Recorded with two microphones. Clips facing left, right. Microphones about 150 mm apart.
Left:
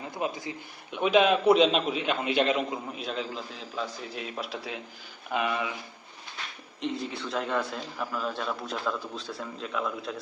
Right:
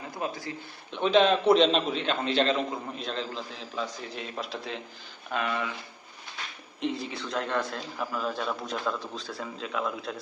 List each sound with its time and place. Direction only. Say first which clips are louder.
0.1 s a man's voice: left 1 dB; 20° left (ahead or behind)
0.9 s a man's voice: even; 10° left (ahead or behind)
5.3 s a man's voice: left 1 dB; 15° left (ahead or behind)
6.8 s a man's voice: right 1 dB; centre (ahead or behind)